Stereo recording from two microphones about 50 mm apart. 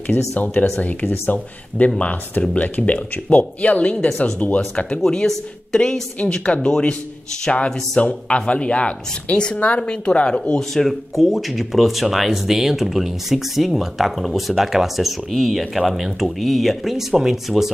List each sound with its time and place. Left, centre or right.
0.7 s a woman's voice: left
4.7 s a woman's voice: centre
5.0 s a woman's voice: centre
10.7 s speech: centre